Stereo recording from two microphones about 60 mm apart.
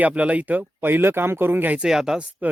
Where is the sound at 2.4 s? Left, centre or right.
Right.